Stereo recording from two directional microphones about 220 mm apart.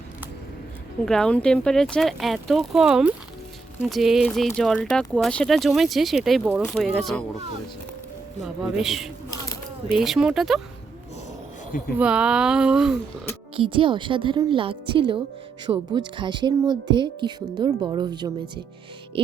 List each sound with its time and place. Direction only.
1.0 s speech: 5° left (ahead or behind)
8.4 s speech: centre (ahead or behind)
11.9 s speech: 5° right (ahead or behind)
13.6 s speech: 25° right (ahead or behind)